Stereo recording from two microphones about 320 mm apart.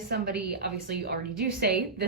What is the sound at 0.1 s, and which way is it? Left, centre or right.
A woman's voice, right.